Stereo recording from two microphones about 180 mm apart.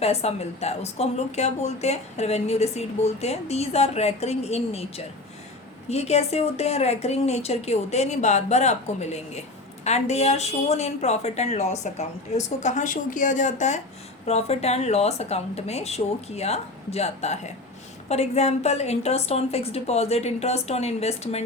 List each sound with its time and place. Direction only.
0.0 s speech: 35° left (ahead or behind)